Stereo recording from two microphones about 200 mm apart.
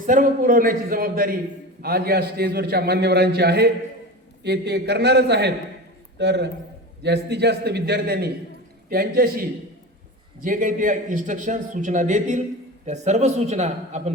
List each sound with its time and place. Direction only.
0.0 s a man's voice: 40° right (ahead or behind)